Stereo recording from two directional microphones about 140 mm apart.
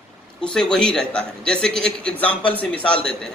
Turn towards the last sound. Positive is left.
turn(degrees=5)  # may be behind; listen again after turning